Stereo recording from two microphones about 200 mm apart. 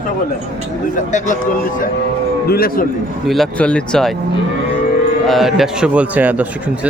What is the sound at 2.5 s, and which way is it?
Speech, 50° left (ahead or behind).